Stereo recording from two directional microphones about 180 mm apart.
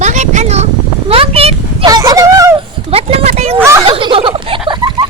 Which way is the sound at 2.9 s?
35° right (ahead or behind).